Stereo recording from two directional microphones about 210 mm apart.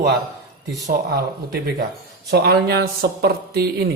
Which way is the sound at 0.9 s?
45° right (ahead or behind).